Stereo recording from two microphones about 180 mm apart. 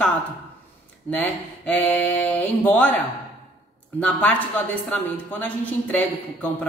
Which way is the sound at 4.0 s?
10° left (ahead or behind).